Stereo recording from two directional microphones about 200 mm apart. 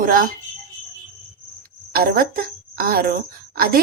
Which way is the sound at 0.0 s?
45° right (ahead or behind).